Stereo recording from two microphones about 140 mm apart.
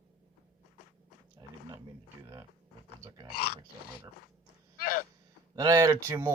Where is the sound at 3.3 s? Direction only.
90° left.